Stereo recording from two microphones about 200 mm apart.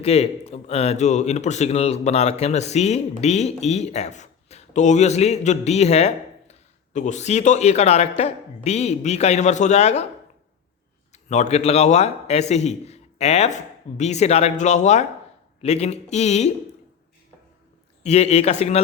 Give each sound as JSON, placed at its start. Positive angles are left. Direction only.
{"t": 0.0, "sound": "speech", "side_deg": 30}
{"t": 11.1, "sound": "speech", "side_deg": 35}
{"t": 18.0, "sound": "speech", "side_deg": 35}